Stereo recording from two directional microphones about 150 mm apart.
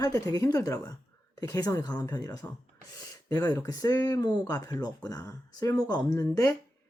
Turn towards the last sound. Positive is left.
turn(degrees=25)  # may be behind; listen again after turning